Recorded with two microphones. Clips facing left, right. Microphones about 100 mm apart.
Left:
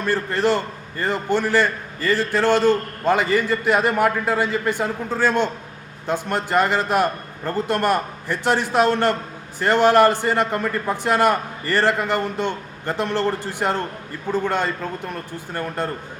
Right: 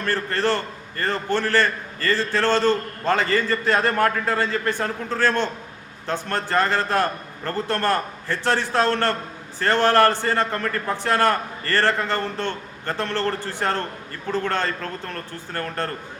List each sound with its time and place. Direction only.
0.0 s a man's voice: 15° left (ahead or behind)